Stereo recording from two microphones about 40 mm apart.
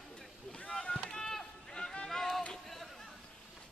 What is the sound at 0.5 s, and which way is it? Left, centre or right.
Rowboat, left.